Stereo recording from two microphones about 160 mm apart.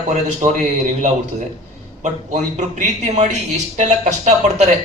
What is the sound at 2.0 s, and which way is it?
Speech, 50° right (ahead or behind).